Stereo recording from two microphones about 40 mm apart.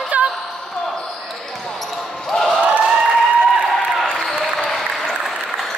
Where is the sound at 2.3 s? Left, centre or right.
Centre.